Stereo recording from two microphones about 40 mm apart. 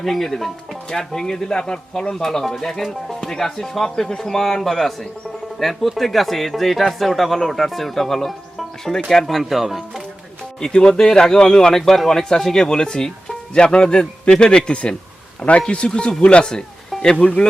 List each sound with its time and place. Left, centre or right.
0.0 s speech: centre
0.9 s speech: centre
10.6 s a man's voice: centre